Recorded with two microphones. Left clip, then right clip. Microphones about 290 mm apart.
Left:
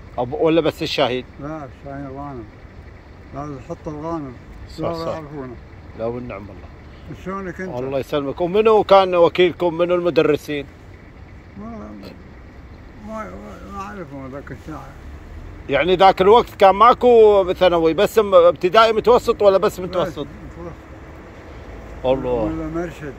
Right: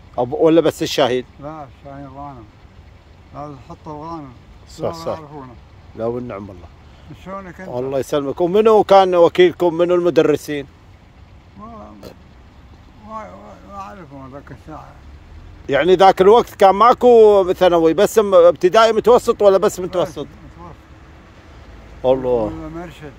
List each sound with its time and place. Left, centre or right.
0.4 s speech: right
1.4 s speech: centre
3.3 s speech: centre
4.7 s speech: right
7.2 s speech: centre
7.9 s speech: right
13.7 s speech: centre
15.6 s speech: right
22.0 s speech: right
22.6 s speech: centre